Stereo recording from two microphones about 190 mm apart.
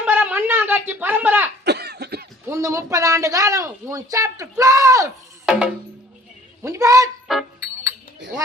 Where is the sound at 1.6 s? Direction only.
60° right (ahead or behind).